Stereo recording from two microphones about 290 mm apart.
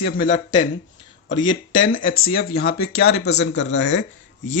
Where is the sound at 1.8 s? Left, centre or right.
Left.